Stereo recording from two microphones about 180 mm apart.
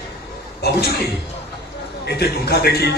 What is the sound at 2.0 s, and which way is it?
Speech, 60° left (ahead or behind).